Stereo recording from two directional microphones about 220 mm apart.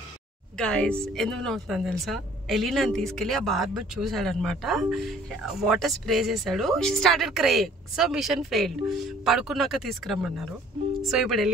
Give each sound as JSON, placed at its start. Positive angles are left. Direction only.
{"t": 0.6, "sound": "a woman's voice", "side_deg": 5}